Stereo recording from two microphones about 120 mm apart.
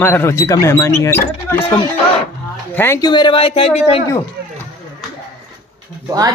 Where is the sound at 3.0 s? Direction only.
40° left (ahead or behind).